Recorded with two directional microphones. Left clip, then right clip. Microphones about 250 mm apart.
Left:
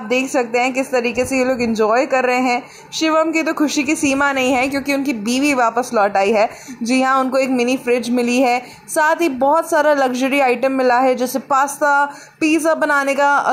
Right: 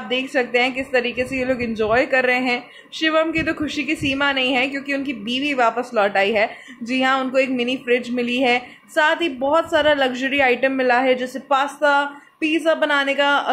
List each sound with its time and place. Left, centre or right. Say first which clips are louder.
0.1 s a woman's voice: left 3 dB; centre